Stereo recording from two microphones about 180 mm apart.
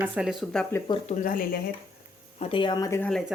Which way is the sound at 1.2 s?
50° left (ahead or behind).